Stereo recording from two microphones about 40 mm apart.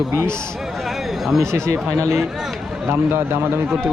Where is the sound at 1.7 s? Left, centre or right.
Right.